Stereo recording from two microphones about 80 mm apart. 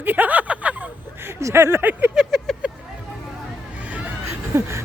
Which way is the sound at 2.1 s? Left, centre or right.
Centre.